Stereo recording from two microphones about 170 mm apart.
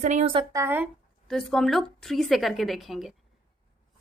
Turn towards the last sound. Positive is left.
turn(degrees=0)  # may be behind; listen again after turning